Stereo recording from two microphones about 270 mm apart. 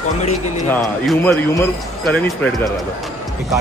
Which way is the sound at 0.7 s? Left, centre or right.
Centre.